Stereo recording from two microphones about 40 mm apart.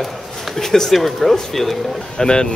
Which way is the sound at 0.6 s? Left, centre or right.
Centre.